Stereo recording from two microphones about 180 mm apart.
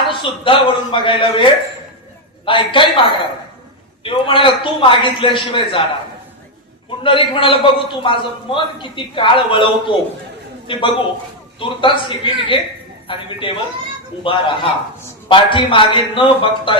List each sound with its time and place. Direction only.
0.1 s a man's voice: 25° left (ahead or behind)
4.0 s a man's voice: 30° left (ahead or behind)
7.0 s a man's voice: 30° left (ahead or behind)